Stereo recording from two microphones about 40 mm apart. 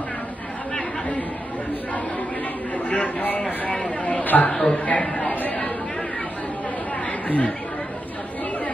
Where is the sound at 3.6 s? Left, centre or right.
Left.